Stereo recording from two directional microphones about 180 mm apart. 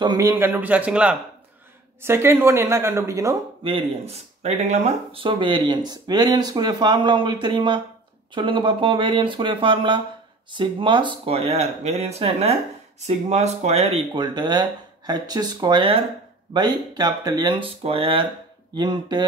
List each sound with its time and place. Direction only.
0.0 s a woman's voice: 20° right (ahead or behind)
3.6 s speech: 30° right (ahead or behind)